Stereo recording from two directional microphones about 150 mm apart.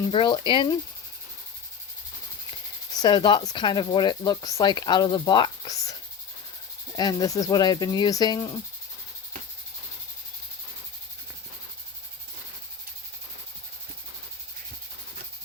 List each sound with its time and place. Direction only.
0.1 s speech: 35° left (ahead or behind)
3.0 s speech: 30° left (ahead or behind)